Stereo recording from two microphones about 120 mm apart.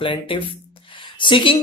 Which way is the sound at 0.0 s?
45° left (ahead or behind).